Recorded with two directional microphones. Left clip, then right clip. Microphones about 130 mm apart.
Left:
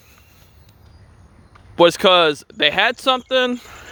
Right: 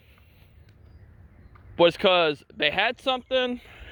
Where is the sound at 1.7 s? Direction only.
30° left (ahead or behind).